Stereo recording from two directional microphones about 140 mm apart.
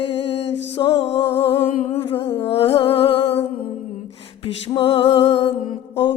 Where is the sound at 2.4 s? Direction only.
40° left (ahead or behind).